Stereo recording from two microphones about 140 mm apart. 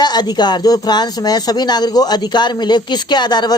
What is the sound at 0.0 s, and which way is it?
Speech, 30° left (ahead or behind).